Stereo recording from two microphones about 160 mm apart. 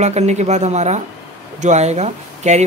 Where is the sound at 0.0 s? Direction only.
45° right (ahead or behind).